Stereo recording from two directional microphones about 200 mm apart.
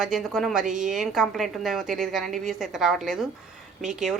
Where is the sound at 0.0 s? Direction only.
Centre (ahead or behind).